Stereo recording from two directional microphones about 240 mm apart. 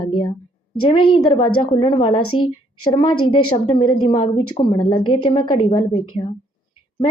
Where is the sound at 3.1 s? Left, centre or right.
Left.